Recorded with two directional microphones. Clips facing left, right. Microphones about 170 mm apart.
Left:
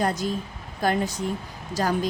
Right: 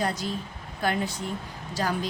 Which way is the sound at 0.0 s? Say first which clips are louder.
Left 4 dB; 50° left (ahead or behind).